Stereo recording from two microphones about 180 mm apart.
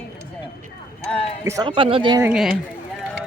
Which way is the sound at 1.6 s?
30° right (ahead or behind).